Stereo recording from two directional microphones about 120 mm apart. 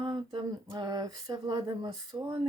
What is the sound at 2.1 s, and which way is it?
Speech, 25° right (ahead or behind).